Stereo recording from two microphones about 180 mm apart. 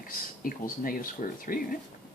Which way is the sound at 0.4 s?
50° left (ahead or behind).